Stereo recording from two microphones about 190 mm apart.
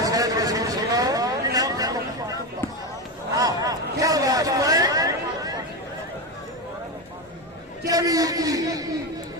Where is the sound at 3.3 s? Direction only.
20° right (ahead or behind).